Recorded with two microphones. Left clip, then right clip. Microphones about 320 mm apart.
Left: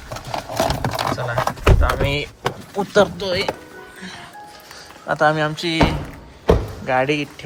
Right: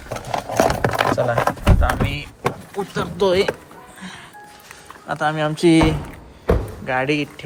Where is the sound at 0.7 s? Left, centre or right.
Right.